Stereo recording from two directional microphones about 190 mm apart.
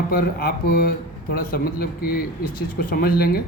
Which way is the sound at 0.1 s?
50° left (ahead or behind).